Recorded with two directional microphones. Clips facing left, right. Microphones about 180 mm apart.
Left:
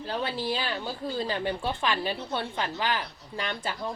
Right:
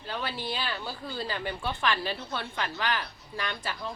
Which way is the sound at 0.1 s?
25° left (ahead or behind).